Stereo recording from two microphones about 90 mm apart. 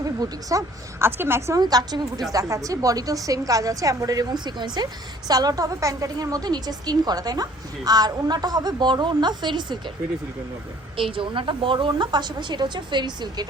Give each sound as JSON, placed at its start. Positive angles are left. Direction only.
{"t": 0.0, "sound": "a woman's voice", "side_deg": -40}
{"t": 0.9, "sound": "a woman's voice", "side_deg": -25}
{"t": 1.5, "sound": "a woman's voice", "side_deg": -45}
{"t": 5.3, "sound": "a woman's voice", "side_deg": -45}
{"t": 10.9, "sound": "a woman's voice", "side_deg": -75}